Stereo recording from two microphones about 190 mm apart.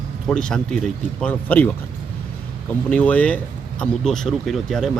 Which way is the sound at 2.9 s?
5° left (ahead or behind).